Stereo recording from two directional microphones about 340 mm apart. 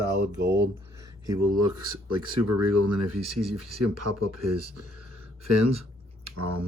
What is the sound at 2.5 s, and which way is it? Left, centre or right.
Speech, right.